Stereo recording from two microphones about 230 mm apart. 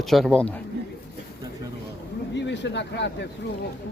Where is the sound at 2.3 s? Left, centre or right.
Left.